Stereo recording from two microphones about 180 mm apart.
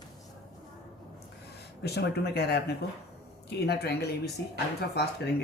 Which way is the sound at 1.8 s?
65° left (ahead or behind).